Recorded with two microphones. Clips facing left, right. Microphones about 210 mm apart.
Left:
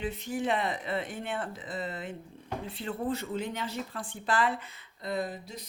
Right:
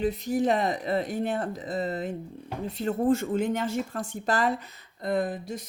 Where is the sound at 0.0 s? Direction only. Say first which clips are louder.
Right 7 dB; 40° right (ahead or behind).